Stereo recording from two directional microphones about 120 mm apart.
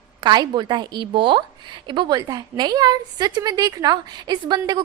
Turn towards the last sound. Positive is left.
turn(degrees=-35)  # may be behind; listen again after turning